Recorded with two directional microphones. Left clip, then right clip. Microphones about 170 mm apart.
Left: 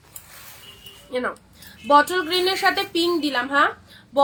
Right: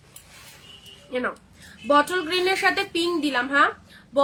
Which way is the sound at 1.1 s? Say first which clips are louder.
Left 1 dB; 15° right (ahead or behind).